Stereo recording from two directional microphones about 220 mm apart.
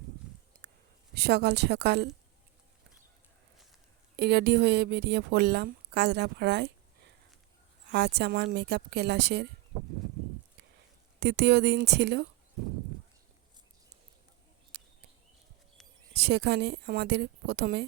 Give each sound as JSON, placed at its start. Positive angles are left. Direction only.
{"t": 1.1, "sound": "a woman's voice", "side_deg": -45}
{"t": 4.2, "sound": "a woman's voice", "side_deg": -50}
{"t": 7.9, "sound": "a woman's voice", "side_deg": -50}
{"t": 11.2, "sound": "a woman's voice", "side_deg": -50}
{"t": 14.7, "sound": "a sound", "side_deg": -45}
{"t": 16.1, "sound": "a woman's voice", "side_deg": -50}